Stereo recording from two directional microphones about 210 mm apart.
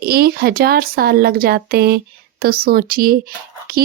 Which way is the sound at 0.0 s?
45° right (ahead or behind).